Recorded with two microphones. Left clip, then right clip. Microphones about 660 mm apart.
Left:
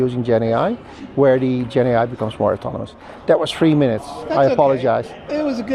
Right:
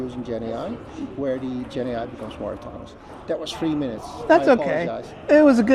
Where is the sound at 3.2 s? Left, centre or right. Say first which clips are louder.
Left 11 dB; left.